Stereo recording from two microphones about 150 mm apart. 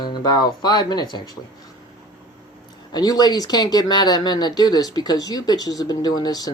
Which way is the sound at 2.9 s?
25° left (ahead or behind).